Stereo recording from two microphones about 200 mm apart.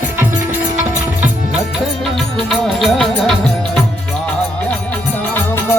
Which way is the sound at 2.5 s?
Centre (ahead or behind).